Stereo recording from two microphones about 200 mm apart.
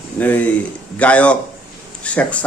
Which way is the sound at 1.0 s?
5° left (ahead or behind).